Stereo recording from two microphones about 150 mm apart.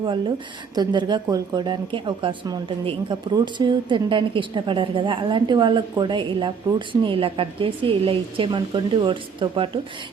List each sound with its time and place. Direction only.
0.8 s a woman's voice: 30° right (ahead or behind)